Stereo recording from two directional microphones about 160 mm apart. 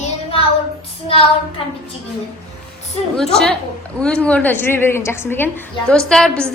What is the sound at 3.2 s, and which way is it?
A woman's voice, 5° left (ahead or behind).